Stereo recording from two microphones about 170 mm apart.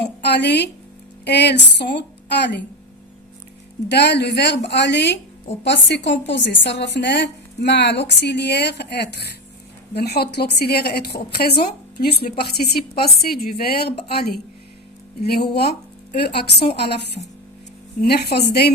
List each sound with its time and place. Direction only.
0.0 s a sound: 80° left
1.2 s speech: 80° left
3.8 s a woman's voice: 85° left
16.1 s a woman's voice: 75° left (ahead or behind)